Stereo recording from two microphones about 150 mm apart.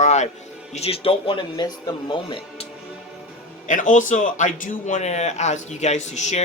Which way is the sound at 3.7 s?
60° left (ahead or behind).